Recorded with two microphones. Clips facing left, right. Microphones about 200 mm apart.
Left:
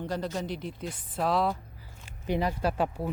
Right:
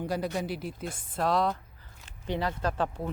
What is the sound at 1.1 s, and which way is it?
Speech, 5° left (ahead or behind).